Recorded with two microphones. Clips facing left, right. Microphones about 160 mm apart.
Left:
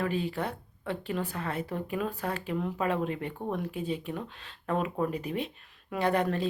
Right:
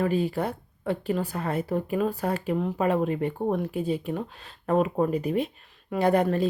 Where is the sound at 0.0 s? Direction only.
40° right (ahead or behind).